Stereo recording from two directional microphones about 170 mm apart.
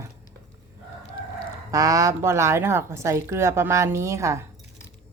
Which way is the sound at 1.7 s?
20° right (ahead or behind).